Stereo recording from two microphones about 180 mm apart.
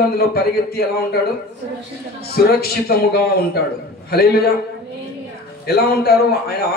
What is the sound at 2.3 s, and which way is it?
Speech, 60° left (ahead or behind).